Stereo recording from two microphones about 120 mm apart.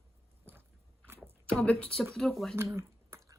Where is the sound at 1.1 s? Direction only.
20° right (ahead or behind).